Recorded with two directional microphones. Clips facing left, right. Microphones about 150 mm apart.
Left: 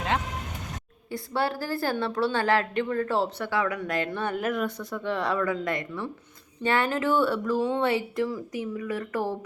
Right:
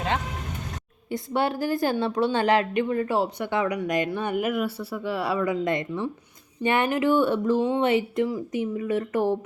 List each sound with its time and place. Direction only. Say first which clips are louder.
1.1 s a woman's voice: right 3 dB; 20° right (ahead or behind)